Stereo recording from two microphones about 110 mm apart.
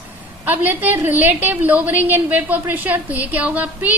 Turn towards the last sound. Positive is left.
turn(degrees=-15)  # may be behind; listen again after turning